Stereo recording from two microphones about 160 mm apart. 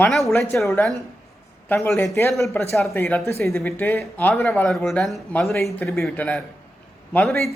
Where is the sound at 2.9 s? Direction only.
10° left (ahead or behind).